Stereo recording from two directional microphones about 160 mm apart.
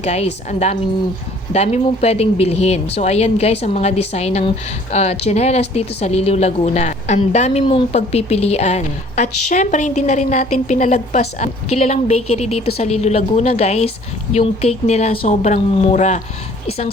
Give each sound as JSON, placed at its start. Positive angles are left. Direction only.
{"t": 0.0, "sound": "a woman's voice", "side_deg": 45}
{"t": 1.5, "sound": "speech", "side_deg": 45}